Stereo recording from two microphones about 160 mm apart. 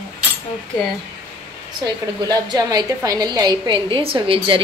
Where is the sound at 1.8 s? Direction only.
25° right (ahead or behind).